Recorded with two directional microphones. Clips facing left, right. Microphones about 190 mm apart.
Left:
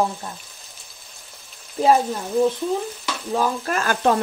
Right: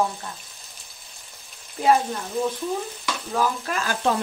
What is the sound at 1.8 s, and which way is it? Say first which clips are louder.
Speech: left 3 dB; 40° left (ahead or behind).